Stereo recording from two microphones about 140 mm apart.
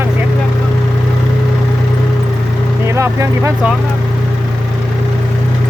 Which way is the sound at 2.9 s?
20° right (ahead or behind).